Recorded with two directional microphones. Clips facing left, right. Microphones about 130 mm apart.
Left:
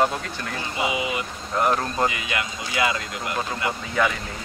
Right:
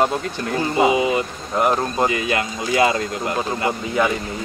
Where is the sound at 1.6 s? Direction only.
20° right (ahead or behind).